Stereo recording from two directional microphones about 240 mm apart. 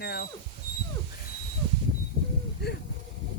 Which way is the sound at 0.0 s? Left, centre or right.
Left.